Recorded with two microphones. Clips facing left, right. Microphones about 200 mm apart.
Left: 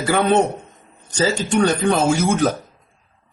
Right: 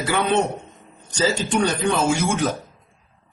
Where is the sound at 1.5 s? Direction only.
40° left (ahead or behind).